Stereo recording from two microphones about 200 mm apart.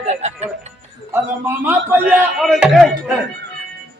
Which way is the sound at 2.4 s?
Centre (ahead or behind).